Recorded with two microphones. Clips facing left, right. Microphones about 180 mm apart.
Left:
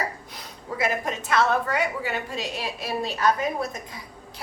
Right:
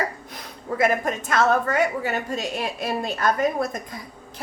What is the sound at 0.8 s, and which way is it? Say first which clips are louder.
A woman's voice: right 5 dB; 50° right (ahead or behind).